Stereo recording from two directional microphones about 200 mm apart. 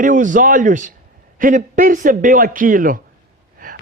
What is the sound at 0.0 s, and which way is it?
A man's voice, 40° right (ahead or behind).